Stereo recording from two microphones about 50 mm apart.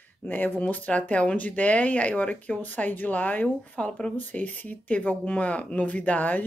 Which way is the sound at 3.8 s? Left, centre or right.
Centre.